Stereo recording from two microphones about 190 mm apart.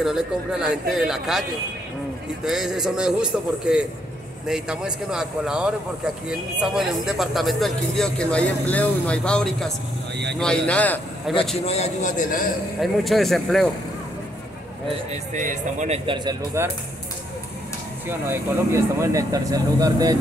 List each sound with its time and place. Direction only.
0.0 s speech: centre (ahead or behind)
2.4 s speech: centre (ahead or behind)
11.6 s a man's voice: 35° left (ahead or behind)
12.8 s speech: centre (ahead or behind)
15.0 s speech: 40° right (ahead or behind)
16.6 s speech: 15° right (ahead or behind)
18.0 s speech: 10° right (ahead or behind)